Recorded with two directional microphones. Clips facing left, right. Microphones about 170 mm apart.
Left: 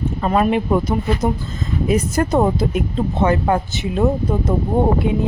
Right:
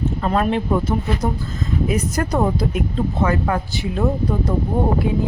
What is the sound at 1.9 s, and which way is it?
Speech, 25° left (ahead or behind).